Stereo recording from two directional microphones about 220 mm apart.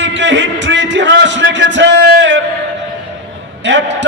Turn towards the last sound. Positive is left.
turn(degrees=-55)  # may be behind; listen again after turning